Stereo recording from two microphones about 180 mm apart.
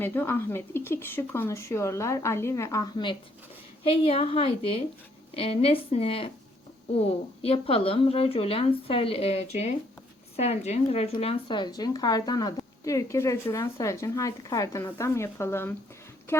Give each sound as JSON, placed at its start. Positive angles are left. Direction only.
{"t": 0.0, "sound": "a woman's voice", "side_deg": 10}